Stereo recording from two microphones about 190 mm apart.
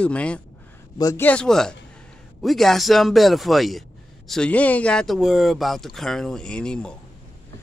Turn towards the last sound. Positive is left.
turn(degrees=5)  # may be behind; listen again after turning